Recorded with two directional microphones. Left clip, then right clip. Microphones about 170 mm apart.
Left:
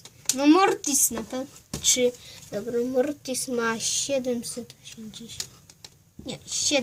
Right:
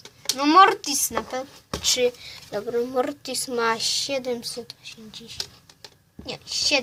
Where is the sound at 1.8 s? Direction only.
40° right (ahead or behind).